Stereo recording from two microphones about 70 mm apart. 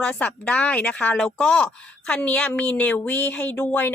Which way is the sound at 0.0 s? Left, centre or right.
Centre.